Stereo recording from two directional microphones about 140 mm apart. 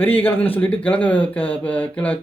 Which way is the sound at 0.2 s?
15° left (ahead or behind).